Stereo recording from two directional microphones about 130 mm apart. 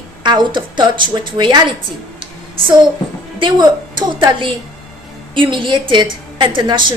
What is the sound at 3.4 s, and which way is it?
A woman's voice, 35° right (ahead or behind).